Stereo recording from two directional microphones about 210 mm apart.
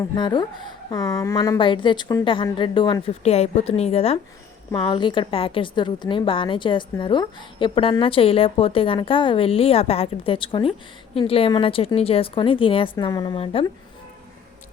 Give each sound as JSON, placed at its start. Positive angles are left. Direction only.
{"t": 0.0, "sound": "a woman's voice", "side_deg": 20}